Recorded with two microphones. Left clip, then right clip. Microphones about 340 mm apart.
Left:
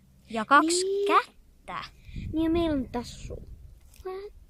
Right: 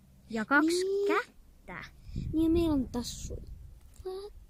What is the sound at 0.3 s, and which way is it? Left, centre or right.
Speech, centre.